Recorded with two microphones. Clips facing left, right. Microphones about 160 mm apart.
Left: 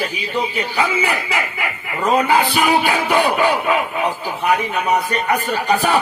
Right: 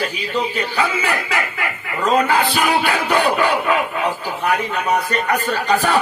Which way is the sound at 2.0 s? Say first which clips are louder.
Left 1 dB; 15° left (ahead or behind).